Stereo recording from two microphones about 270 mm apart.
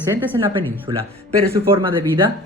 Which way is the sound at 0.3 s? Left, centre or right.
Centre.